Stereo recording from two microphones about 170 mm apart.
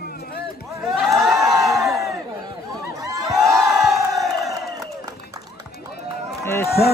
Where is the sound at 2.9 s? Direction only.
20° right (ahead or behind).